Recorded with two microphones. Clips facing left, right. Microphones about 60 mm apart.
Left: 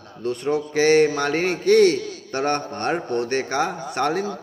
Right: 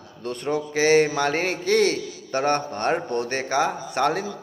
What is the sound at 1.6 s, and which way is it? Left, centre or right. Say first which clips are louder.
Speech: left 6 dB; left.